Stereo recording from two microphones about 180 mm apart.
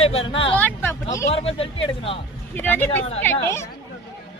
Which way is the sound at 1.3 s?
30° left (ahead or behind).